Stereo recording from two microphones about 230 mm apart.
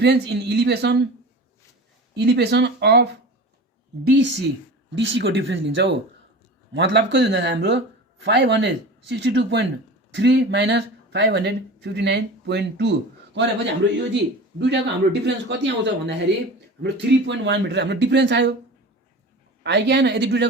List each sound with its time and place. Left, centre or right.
0.0 s speech: right
2.1 s speech: right
4.1 s speech: right
14.6 s speech: right
19.6 s speech: right